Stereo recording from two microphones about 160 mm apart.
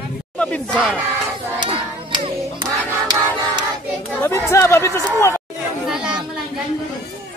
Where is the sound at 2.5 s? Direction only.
25° right (ahead or behind).